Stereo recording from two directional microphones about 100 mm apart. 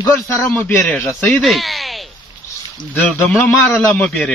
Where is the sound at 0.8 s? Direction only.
10° left (ahead or behind).